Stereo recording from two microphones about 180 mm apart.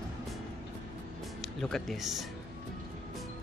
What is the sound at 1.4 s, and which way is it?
Speech, centre (ahead or behind).